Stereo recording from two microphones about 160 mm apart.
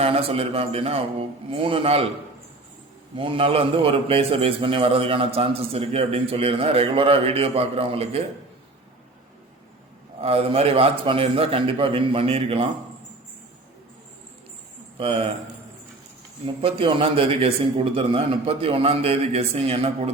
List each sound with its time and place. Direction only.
0.0 s a man's voice: 35° right (ahead or behind)
3.2 s a man's voice: 35° right (ahead or behind)
10.2 s a man's voice: 40° right (ahead or behind)
14.9 s speech: 35° right (ahead or behind)
16.6 s a man's voice: 35° right (ahead or behind)